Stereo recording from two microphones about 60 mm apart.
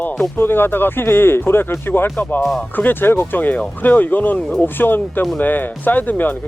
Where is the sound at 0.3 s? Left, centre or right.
Left.